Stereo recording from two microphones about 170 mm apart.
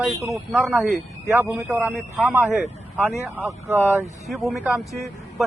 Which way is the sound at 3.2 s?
Centre (ahead or behind).